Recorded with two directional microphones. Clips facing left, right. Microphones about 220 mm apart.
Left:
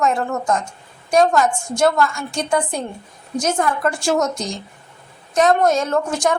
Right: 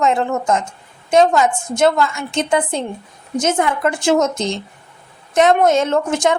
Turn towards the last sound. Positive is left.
turn(degrees=-20)  # may be behind; listen again after turning